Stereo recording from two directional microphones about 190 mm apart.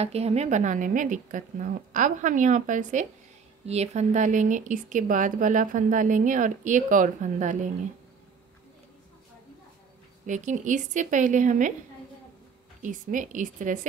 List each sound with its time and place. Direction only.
0.0 s speech: 35° right (ahead or behind)
10.2 s speech: 40° right (ahead or behind)
12.8 s speech: 45° right (ahead or behind)